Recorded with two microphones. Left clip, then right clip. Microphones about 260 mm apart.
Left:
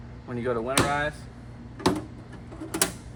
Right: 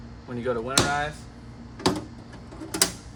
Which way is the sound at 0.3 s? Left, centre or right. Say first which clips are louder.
Even; centre.